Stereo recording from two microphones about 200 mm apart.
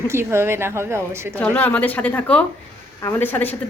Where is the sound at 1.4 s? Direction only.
5° left (ahead or behind).